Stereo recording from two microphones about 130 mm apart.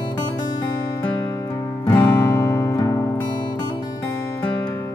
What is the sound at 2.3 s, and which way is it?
Music, 20° left (ahead or behind).